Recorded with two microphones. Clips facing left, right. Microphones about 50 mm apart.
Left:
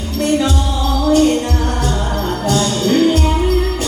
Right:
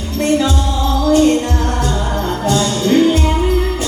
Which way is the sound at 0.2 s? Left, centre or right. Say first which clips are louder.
Right 1 dB; centre.